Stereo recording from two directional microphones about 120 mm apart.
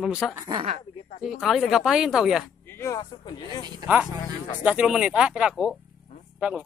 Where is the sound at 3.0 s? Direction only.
35° left (ahead or behind).